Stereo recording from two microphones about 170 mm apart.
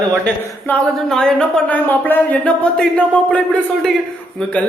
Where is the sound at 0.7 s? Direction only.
5° left (ahead or behind).